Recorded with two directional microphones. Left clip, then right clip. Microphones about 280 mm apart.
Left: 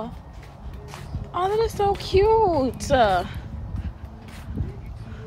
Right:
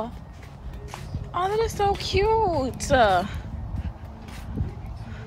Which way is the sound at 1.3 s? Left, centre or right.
Centre.